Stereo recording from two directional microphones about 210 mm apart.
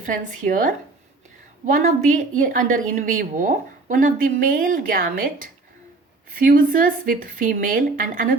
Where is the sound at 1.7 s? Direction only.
40° right (ahead or behind).